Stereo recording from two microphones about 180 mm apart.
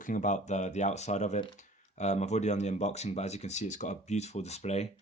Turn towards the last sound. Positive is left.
turn(degrees=35)  # may be behind; listen again after turning